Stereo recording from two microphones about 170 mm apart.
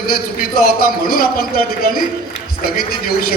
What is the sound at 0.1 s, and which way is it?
A man's voice, 60° left (ahead or behind).